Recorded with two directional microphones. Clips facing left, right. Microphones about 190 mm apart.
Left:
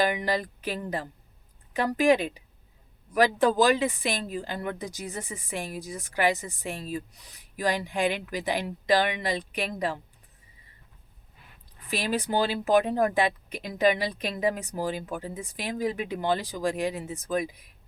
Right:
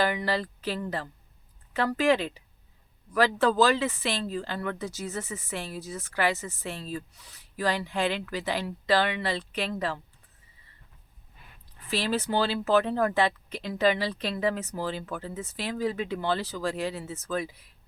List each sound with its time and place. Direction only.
0.0 s speech: 15° left (ahead or behind)
11.9 s speech: 15° left (ahead or behind)